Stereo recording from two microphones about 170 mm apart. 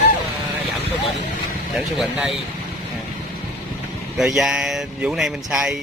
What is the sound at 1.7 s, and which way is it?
Speech, centre (ahead or behind).